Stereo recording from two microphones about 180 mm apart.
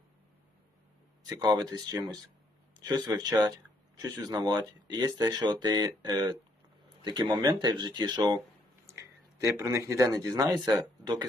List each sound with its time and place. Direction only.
1.3 s speech: 20° right (ahead or behind)
9.4 s speech: 15° right (ahead or behind)